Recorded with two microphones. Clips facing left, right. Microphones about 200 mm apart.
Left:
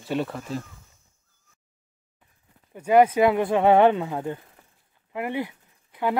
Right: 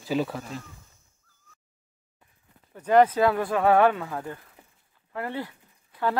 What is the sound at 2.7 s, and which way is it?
Speech, 10° left (ahead or behind).